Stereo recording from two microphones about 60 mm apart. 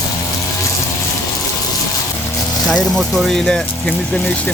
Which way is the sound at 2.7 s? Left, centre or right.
Centre.